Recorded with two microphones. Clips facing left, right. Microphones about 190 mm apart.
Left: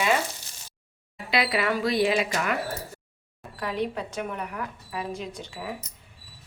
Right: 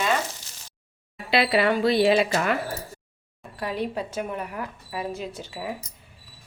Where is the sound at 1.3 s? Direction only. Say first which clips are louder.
Right 4 dB; 30° right (ahead or behind).